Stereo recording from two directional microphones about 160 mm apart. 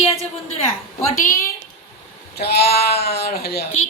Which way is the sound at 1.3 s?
20° left (ahead or behind).